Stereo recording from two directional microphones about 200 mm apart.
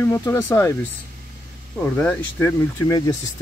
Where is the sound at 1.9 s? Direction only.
10° left (ahead or behind).